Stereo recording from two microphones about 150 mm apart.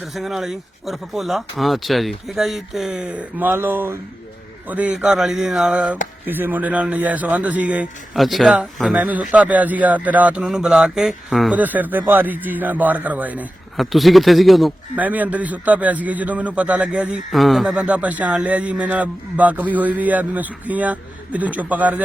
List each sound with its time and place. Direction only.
0.0 s a man's voice: centre (ahead or behind)
15.0 s a man's voice: 10° right (ahead or behind)